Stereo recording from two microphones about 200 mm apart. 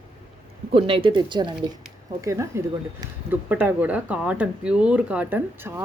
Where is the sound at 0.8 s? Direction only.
25° right (ahead or behind).